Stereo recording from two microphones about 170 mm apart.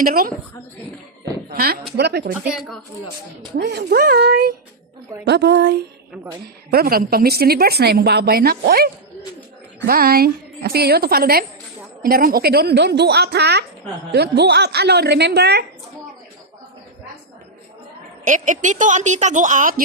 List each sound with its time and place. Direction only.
0.0 s speech: 60° right (ahead or behind)
1.5 s a woman's voice: 65° right (ahead or behind)
2.4 s speech: 5° right (ahead or behind)
3.5 s a woman's voice: 75° right (ahead or behind)
5.2 s a woman's voice: 80° right
6.7 s a woman's voice: 60° right (ahead or behind)
18.3 s a woman's voice: 45° right (ahead or behind)